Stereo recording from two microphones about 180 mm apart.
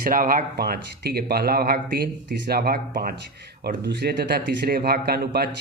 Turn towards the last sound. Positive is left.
turn(degrees=-65)  # may be behind; listen again after turning